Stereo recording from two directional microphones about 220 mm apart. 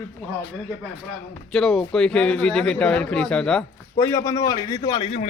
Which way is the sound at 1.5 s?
Centre (ahead or behind).